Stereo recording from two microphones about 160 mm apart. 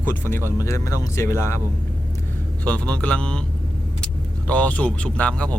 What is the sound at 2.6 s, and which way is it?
Speech, 5° left (ahead or behind).